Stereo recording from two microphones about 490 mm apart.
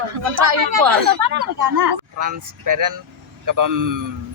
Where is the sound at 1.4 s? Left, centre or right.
Right.